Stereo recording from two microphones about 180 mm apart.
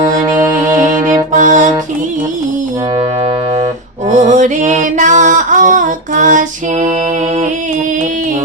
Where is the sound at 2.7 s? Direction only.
25° right (ahead or behind).